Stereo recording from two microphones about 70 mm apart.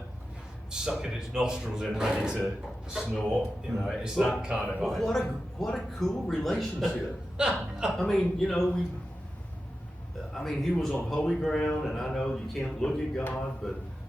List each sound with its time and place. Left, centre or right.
0.7 s speech: centre
4.8 s speech: centre
7.3 s a man's voice: centre
7.9 s speech: centre
10.3 s speech: centre